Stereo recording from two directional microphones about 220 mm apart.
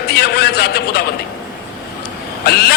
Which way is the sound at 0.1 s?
45° left (ahead or behind).